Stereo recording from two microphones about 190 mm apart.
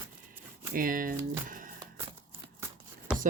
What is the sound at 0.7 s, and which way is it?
Speech, 50° right (ahead or behind).